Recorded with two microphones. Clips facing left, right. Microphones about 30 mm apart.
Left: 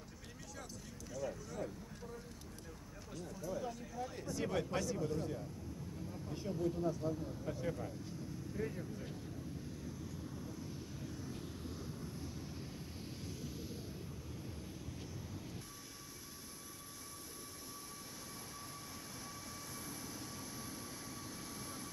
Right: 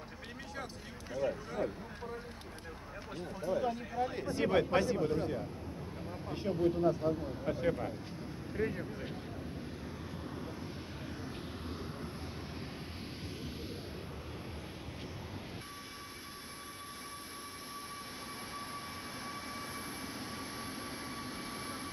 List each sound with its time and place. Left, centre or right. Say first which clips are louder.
1.1 s speech: right 8 dB; right
3.2 s speech: right 8 dB; right
9.8 s vehicle: right 4 dB; right
20.0 s vehicle: right 6 dB; right